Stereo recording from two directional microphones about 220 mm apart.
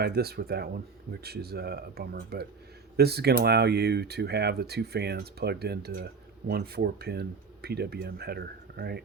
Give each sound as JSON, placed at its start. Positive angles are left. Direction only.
{"t": 0.0, "sound": "speech", "side_deg": -45}